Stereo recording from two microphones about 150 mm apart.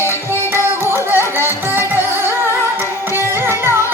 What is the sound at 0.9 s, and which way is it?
Music, 15° right (ahead or behind).